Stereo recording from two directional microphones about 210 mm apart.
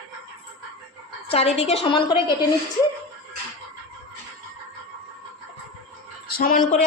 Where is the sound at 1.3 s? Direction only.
30° left (ahead or behind).